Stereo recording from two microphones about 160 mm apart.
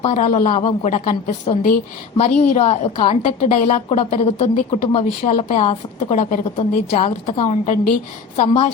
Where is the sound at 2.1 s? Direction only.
40° left (ahead or behind).